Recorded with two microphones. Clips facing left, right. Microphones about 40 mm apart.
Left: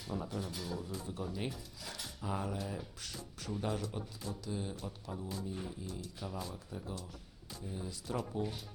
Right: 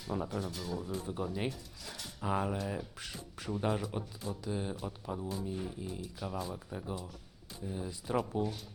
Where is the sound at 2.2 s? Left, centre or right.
Right.